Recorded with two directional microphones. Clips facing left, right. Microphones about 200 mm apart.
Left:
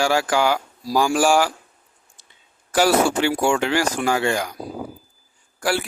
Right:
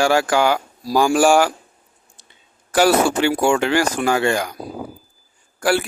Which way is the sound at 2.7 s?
55° right (ahead or behind).